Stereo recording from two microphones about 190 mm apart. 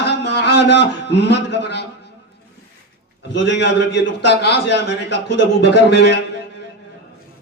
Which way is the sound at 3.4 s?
65° left (ahead or behind).